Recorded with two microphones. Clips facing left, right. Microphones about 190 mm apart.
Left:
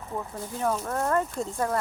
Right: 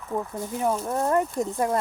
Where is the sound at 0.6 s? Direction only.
15° right (ahead or behind).